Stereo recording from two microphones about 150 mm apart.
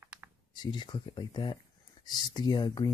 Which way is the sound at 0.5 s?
30° left (ahead or behind).